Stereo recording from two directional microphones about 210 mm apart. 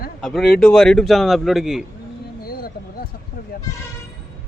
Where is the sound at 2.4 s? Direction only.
45° left (ahead or behind).